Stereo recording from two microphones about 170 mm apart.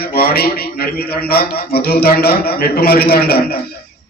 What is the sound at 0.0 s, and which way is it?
A man's voice, 65° left (ahead or behind).